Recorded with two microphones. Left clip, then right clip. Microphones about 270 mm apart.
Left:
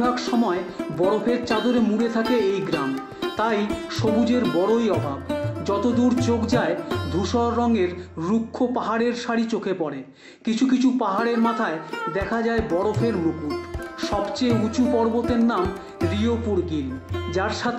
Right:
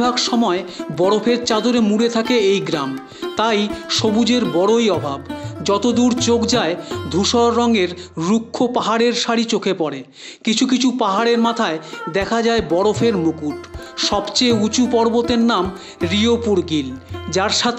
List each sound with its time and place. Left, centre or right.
0.0 s speech: right